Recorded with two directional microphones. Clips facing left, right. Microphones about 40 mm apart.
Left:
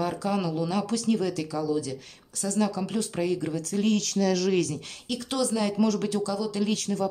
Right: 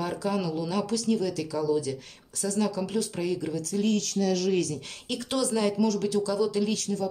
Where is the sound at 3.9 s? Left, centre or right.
Left.